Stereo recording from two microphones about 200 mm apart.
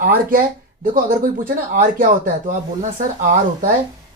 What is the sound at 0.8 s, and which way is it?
Speech, 45° right (ahead or behind).